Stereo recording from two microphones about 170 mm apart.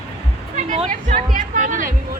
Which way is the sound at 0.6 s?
40° right (ahead or behind).